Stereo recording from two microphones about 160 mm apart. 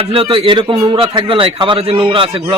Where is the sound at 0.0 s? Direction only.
35° right (ahead or behind).